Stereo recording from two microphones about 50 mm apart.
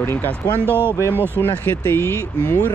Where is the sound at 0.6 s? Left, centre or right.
Right.